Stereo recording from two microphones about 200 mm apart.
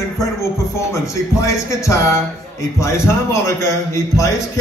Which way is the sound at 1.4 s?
15° left (ahead or behind).